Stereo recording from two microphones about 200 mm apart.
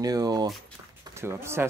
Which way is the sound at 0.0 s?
20° right (ahead or behind).